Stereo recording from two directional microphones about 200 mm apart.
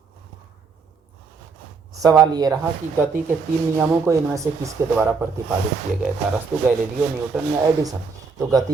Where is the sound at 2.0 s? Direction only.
15° right (ahead or behind).